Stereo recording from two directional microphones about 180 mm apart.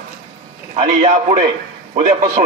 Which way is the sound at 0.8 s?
40° right (ahead or behind).